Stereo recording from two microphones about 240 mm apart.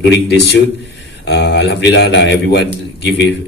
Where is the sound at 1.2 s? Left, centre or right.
Left.